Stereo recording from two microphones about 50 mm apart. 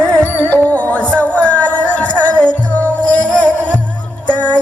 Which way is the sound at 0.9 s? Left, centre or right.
Left.